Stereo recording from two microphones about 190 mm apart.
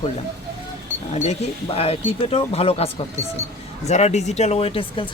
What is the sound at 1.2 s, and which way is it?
Speech, 35° left (ahead or behind).